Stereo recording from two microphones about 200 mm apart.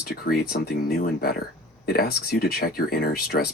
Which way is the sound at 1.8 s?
50° left (ahead or behind).